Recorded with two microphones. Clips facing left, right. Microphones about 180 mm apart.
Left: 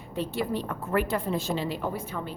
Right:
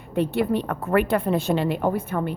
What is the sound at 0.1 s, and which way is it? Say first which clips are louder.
A woman's voice: right 7 dB; 60° right (ahead or behind).